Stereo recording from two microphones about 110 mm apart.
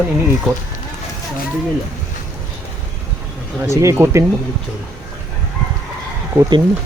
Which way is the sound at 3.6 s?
25° right (ahead or behind).